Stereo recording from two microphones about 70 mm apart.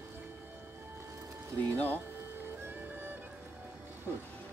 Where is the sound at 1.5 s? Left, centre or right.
Left.